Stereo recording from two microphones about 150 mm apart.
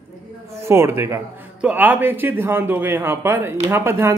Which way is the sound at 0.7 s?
15° right (ahead or behind).